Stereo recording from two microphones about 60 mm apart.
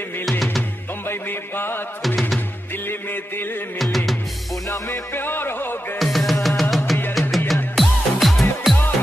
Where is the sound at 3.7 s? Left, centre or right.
Centre.